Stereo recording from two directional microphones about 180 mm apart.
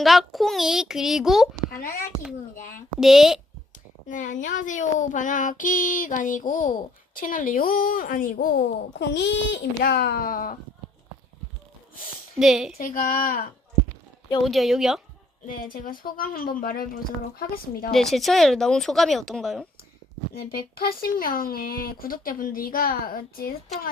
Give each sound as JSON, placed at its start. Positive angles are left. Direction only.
{"t": 0.0, "sound": "speech", "side_deg": 0}
{"t": 3.0, "sound": "speech", "side_deg": 0}
{"t": 4.1, "sound": "speech", "side_deg": 45}
{"t": 9.8, "sound": "speech", "side_deg": 60}
{"t": 12.4, "sound": "speech", "side_deg": 0}
{"t": 12.8, "sound": "speech", "side_deg": 50}
{"t": 14.4, "sound": "speech", "side_deg": 0}
{"t": 15.4, "sound": "a woman's voice", "side_deg": 50}
{"t": 17.9, "sound": "speech", "side_deg": 0}
{"t": 20.3, "sound": "speech", "side_deg": 60}